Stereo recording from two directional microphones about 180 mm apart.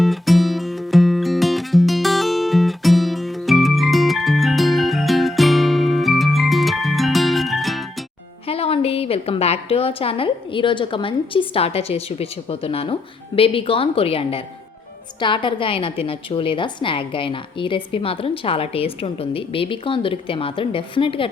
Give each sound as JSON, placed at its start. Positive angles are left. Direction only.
{"t": 0.0, "sound": "music", "side_deg": 0}
{"t": 8.4, "sound": "a woman's voice", "side_deg": 35}